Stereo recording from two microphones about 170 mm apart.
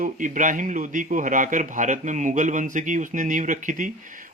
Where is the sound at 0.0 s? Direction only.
50° right (ahead or behind).